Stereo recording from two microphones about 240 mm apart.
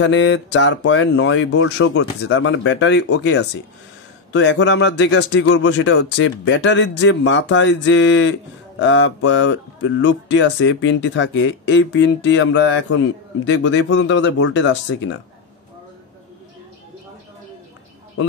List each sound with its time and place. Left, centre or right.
0.0 s speech: left
4.3 s speech: left